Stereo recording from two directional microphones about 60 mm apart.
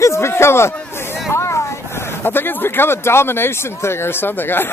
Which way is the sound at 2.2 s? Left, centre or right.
Left.